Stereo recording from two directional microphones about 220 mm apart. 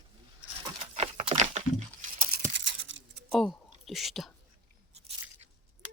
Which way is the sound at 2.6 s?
60° right (ahead or behind).